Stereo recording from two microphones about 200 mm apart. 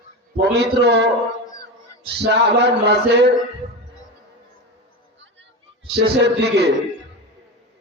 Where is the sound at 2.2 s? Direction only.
60° right (ahead or behind).